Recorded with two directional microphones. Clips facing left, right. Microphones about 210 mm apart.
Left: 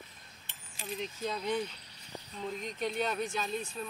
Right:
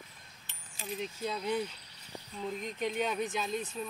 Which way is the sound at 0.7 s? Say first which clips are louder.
Right 1 dB; 5° right (ahead or behind).